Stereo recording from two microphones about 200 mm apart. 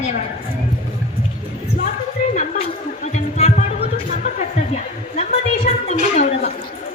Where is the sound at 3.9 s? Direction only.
40° left (ahead or behind).